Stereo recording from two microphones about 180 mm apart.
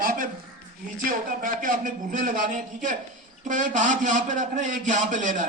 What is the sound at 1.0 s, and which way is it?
A man's voice, 50° right (ahead or behind).